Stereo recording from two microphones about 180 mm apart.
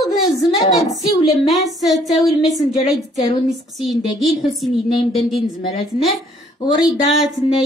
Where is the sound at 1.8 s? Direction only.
Centre (ahead or behind).